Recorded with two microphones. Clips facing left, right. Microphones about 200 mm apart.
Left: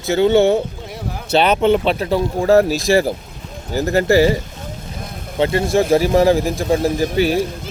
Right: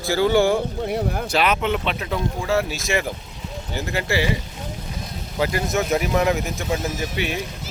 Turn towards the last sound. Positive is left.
turn(degrees=35)  # may be behind; listen again after turning